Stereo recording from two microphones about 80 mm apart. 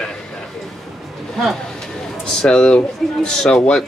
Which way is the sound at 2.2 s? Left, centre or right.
Centre.